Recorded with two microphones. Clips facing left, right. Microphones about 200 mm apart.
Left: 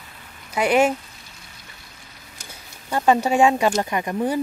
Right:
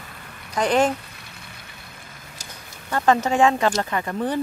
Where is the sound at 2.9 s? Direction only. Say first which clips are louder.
Left 1 dB; 15° left (ahead or behind).